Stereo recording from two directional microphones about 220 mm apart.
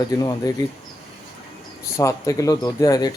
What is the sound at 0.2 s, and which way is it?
Speech, 15° left (ahead or behind).